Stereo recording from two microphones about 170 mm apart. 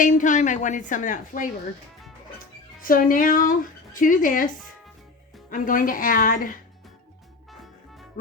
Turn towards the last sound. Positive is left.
turn(degrees=55)  # may be behind; listen again after turning